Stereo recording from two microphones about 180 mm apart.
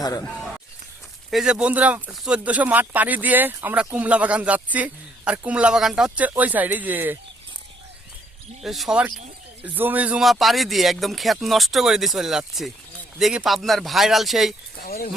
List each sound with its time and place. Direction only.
0.0 s speech: 20° left (ahead or behind)
1.3 s speech: 5° right (ahead or behind)
8.6 s speech: centre (ahead or behind)
14.8 s speech: 55° left (ahead or behind)